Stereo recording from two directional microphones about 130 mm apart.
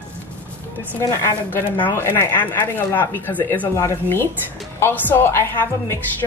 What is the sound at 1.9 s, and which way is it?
A woman's voice, 15° left (ahead or behind).